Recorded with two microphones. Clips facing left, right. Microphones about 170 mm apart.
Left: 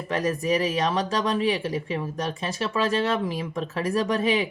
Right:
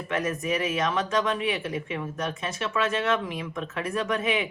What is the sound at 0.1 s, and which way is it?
Speech, 35° left (ahead or behind).